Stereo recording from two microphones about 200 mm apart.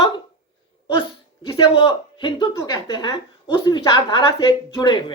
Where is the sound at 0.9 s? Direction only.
25° left (ahead or behind).